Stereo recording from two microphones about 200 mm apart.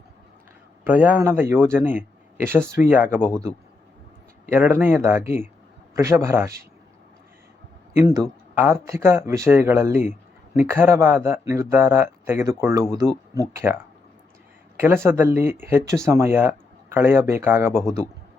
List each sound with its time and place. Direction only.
0.9 s speech: 10° right (ahead or behind)
3.2 s speech: 5° left (ahead or behind)
4.4 s speech: 10° right (ahead or behind)
7.9 s speech: 15° right (ahead or behind)
14.8 s speech: 10° right (ahead or behind)